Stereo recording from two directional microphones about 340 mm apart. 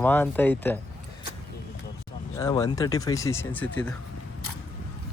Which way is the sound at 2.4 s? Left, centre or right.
Centre.